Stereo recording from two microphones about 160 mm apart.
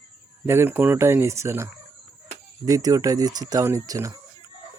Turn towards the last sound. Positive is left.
turn(degrees=-20)  # may be behind; listen again after turning